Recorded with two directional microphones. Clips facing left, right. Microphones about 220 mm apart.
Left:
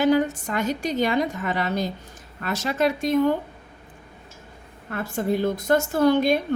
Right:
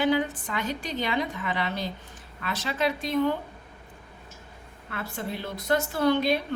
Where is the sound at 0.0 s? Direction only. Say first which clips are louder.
Left 5 dB; 45° left (ahead or behind).